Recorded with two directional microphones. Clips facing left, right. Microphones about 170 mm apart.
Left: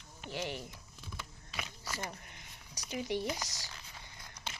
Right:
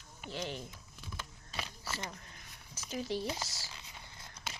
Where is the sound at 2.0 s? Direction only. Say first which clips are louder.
Left 1 dB; 20° left (ahead or behind).